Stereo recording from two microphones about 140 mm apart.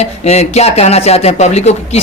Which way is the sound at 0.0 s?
50° left (ahead or behind).